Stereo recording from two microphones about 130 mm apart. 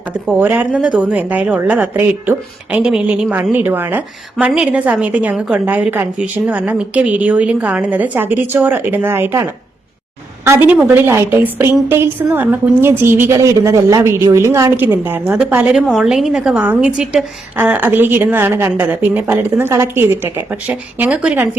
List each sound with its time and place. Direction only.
0.3 s speech: 15° right (ahead or behind)
10.4 s speech: 15° right (ahead or behind)